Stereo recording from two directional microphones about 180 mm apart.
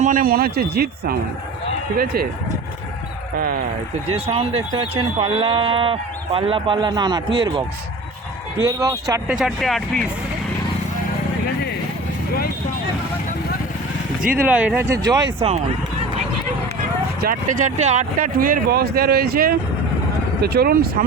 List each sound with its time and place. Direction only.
0.0 s speech: 50° right (ahead or behind)
2.1 s speech: 55° right (ahead or behind)
3.3 s speech: 55° right (ahead or behind)
4.3 s speech: 30° right (ahead or behind)
8.6 s speech: 20° right (ahead or behind)
9.2 s speech: centre (ahead or behind)
14.2 s speech: 50° right (ahead or behind)
14.4 s speech: 10° right (ahead or behind)
15.4 s speech: 35° right (ahead or behind)
17.2 s speech: 50° right (ahead or behind)
18.3 s speech: 55° right (ahead or behind)